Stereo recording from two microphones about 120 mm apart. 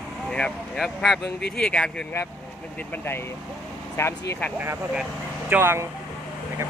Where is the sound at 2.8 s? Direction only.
15° left (ahead or behind).